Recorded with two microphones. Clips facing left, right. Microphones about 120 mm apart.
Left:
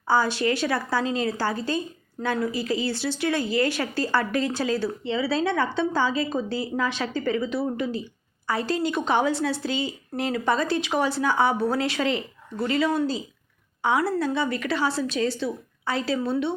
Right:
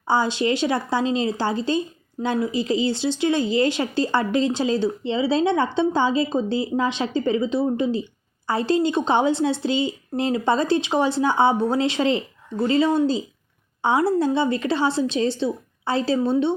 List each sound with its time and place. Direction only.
0.1 s a woman's voice: 20° right (ahead or behind)